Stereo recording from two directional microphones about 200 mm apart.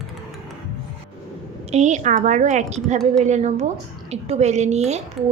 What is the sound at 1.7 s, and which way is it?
A woman's voice, 35° right (ahead or behind).